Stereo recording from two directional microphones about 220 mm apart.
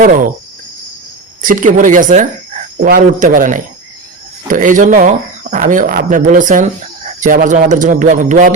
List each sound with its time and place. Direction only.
1.4 s speech: 35° right (ahead or behind)